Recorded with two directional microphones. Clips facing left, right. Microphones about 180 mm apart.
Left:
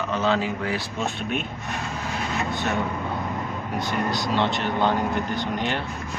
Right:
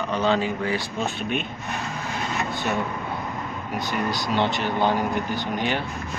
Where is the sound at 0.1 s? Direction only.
Centre (ahead or behind).